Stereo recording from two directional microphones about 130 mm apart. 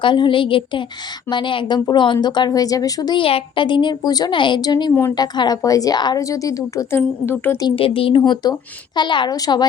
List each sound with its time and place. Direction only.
0.0 s a woman's voice: 40° left (ahead or behind)
7.3 s speech: 15° left (ahead or behind)
7.8 s speech: 45° left (ahead or behind)